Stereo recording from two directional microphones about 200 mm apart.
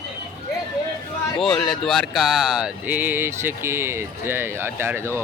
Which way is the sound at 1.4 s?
Centre (ahead or behind).